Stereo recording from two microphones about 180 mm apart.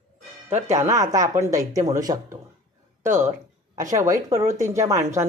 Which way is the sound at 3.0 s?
45° right (ahead or behind).